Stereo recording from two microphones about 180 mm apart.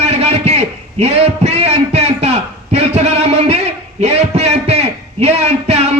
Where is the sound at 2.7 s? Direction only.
35° right (ahead or behind).